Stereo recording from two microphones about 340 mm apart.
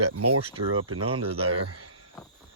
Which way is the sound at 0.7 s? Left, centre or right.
Right.